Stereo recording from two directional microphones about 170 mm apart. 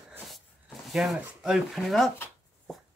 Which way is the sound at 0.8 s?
Centre (ahead or behind).